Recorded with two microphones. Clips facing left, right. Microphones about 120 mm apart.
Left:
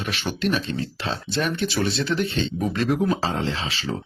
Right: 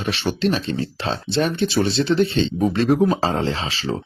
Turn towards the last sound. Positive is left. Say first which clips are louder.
# right 4 dB
turn(degrees=-35)  # may be behind; listen again after turning